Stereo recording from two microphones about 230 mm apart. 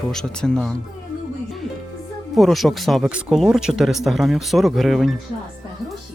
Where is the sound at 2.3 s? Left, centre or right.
Centre.